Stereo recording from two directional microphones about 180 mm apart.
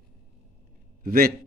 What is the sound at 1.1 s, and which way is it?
Speech, 50° right (ahead or behind).